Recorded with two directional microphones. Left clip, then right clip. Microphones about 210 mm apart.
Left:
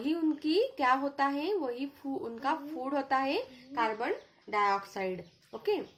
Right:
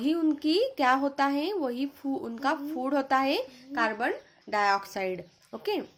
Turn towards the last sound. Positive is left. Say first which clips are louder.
# right 1 dB
turn(degrees=-35)  # may be behind; listen again after turning